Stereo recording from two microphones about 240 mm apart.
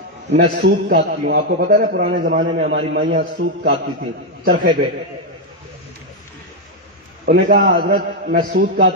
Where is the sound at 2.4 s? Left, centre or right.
Right.